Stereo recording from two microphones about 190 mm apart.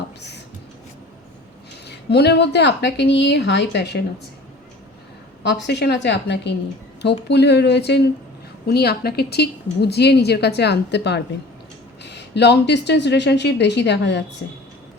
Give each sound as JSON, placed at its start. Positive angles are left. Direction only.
{"t": 1.9, "sound": "a woman's voice", "side_deg": 60}
{"t": 5.4, "sound": "a woman's voice", "side_deg": 65}
{"t": 14.4, "sound": "a woman's voice", "side_deg": 75}